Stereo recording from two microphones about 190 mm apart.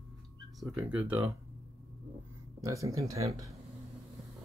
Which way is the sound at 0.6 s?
10° right (ahead or behind).